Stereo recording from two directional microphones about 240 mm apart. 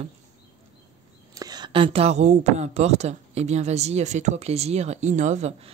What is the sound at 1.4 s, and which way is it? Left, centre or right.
Speech, centre.